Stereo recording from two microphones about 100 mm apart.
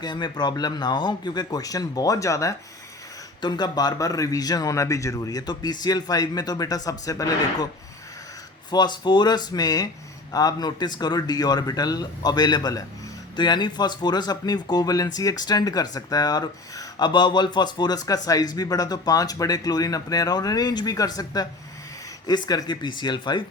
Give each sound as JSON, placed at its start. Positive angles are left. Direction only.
{"t": 0.0, "sound": "speech", "side_deg": 45}
{"t": 3.4, "sound": "speech", "side_deg": 45}
{"t": 8.7, "sound": "speech", "side_deg": 45}